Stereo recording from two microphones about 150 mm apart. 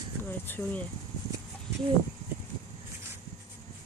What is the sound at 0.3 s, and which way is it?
Speech, 15° left (ahead or behind).